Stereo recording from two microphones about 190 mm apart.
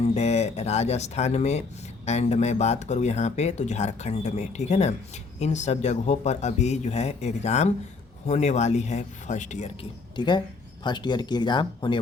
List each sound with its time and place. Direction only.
0.0 s speech: 35° left (ahead or behind)
10.2 s speech: 25° left (ahead or behind)